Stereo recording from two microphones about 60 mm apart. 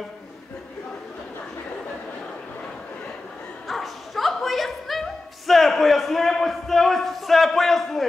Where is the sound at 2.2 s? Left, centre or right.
Centre.